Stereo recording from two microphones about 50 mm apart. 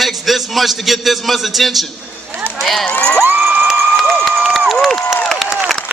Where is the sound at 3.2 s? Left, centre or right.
Right.